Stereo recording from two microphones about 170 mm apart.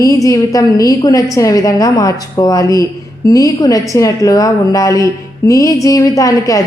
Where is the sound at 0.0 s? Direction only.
20° left (ahead or behind).